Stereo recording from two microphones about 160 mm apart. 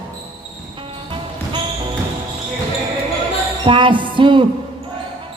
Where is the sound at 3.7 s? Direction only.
30° right (ahead or behind).